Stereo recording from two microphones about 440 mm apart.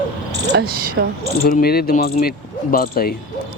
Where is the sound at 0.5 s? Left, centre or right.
Centre.